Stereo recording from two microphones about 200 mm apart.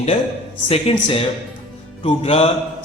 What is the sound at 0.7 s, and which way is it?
A man's voice, 30° left (ahead or behind).